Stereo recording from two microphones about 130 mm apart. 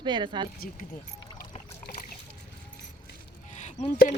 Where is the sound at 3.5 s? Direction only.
65° left (ahead or behind).